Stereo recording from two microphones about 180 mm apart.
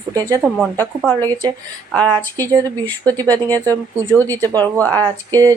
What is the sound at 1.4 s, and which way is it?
Speech, 25° right (ahead or behind).